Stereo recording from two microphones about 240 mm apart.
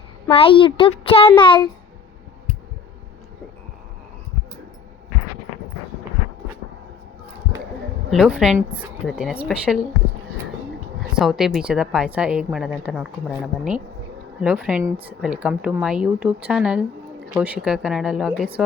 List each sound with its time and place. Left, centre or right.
0.3 s speech: left
8.1 s a woman's voice: centre
11.1 s a woman's voice: centre